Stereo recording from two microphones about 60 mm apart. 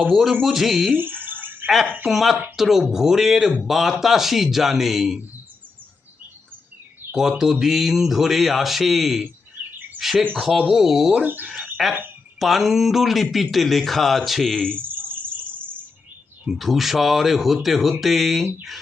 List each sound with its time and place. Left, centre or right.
0.0 s speech: centre
0.9 s a sound: right
2.0 s speech: centre
7.2 s speech: centre
14.8 s cricket: right
16.5 s speech: centre